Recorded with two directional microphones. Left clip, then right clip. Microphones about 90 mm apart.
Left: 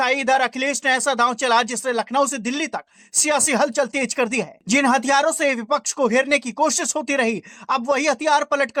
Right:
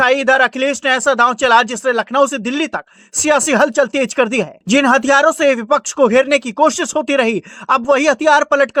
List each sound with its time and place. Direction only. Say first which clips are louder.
0.0 s speech: right 7 dB; 40° right (ahead or behind)